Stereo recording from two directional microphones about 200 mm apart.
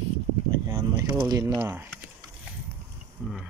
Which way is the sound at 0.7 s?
20° right (ahead or behind).